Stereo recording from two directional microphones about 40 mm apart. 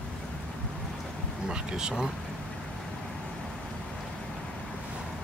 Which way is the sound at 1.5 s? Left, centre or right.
Centre.